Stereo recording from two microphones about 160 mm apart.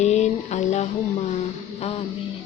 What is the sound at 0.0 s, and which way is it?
Music, 45° left (ahead or behind).